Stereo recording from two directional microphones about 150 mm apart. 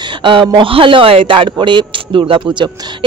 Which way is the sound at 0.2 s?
35° right (ahead or behind).